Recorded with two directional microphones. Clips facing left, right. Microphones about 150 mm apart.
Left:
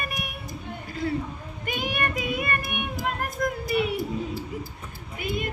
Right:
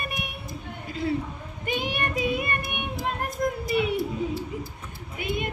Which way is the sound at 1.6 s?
30° right (ahead or behind).